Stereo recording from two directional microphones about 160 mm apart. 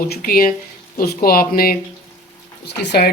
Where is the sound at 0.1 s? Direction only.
65° left (ahead or behind).